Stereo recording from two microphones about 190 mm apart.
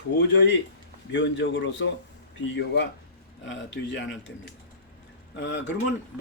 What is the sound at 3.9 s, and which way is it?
Speech, 70° left (ahead or behind).